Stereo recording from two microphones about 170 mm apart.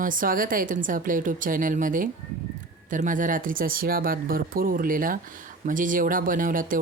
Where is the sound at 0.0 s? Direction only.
55° right (ahead or behind).